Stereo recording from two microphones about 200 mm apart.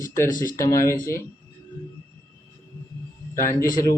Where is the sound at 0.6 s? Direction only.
15° left (ahead or behind).